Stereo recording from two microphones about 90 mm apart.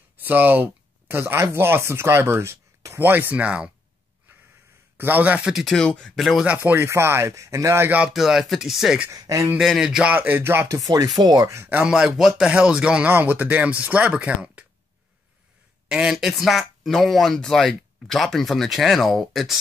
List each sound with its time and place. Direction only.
0.2 s speech: 20° right (ahead or behind)
4.9 s speech: 20° right (ahead or behind)
5.5 s speech: 5° right (ahead or behind)
5.8 s speech: 10° left (ahead or behind)
6.4 s speech: 20° right (ahead or behind)
8.1 s speech: 5° right (ahead or behind)
9.1 s speech: 40° right (ahead or behind)
9.6 s speech: 5° right (ahead or behind); by 10.8 s 25° right (ahead or behind)
11.1 s speech: 50° right (ahead or behind)
11.5 s speech: 25° right (ahead or behind)
11.8 s speech: 10° right (ahead or behind)
15.9 s speech: 5° right (ahead or behind)